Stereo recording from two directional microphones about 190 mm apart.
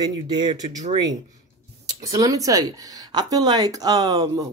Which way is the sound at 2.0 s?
20° right (ahead or behind).